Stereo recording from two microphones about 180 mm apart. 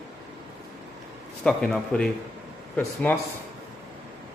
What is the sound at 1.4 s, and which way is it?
Speech, 5° left (ahead or behind).